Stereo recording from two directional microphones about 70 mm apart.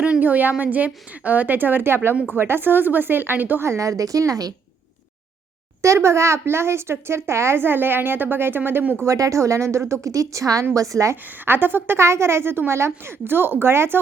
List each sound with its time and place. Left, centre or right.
0.0 s a woman's voice: right
3.7 s speech: right
5.8 s a woman's voice: right
9.0 s speech: right
11.4 s a woman's voice: right